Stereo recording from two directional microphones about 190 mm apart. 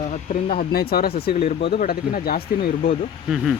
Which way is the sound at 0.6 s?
50° left (ahead or behind).